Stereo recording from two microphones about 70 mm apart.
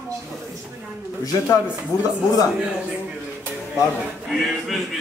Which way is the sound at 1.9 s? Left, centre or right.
Left.